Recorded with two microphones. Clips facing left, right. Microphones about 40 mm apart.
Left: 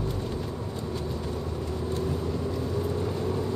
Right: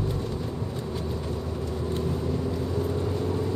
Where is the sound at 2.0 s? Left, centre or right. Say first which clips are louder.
Right 1 dB; centre.